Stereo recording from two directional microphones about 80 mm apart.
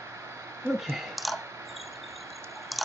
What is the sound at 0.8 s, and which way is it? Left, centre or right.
Clicking, centre.